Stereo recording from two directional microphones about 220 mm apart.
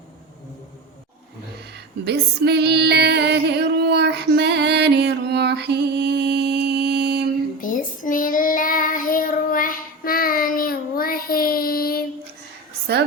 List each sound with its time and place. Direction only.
2.0 s music: 50° right (ahead or behind)
7.6 s child singing: 40° left (ahead or behind)